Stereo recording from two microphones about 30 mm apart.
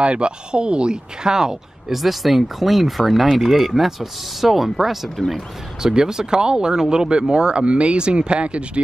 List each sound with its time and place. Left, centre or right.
0.0 s speech: right
1.3 s speech: centre
1.9 s speech: centre
5.8 s speech: right
7.5 s speech: right